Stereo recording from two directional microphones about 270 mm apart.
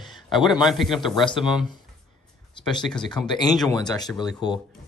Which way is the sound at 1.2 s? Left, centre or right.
Centre.